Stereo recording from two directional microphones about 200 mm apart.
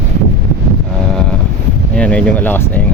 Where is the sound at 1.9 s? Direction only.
5° left (ahead or behind).